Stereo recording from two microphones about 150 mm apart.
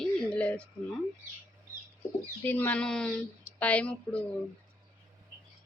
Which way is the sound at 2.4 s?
10° left (ahead or behind).